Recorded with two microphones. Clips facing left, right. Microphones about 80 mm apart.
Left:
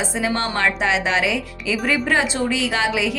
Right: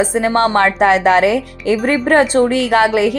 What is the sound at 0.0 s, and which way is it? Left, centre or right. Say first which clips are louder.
Speech: right 9 dB; right.